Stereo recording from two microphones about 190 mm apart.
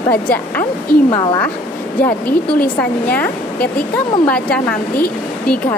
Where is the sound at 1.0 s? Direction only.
25° left (ahead or behind).